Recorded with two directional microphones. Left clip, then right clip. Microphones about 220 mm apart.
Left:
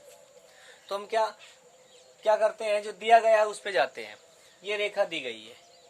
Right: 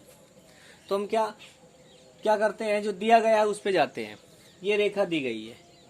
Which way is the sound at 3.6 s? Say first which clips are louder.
Right 2 dB; 15° right (ahead or behind).